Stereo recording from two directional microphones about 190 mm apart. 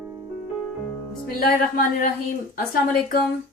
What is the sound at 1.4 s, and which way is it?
Speech, 45° left (ahead or behind).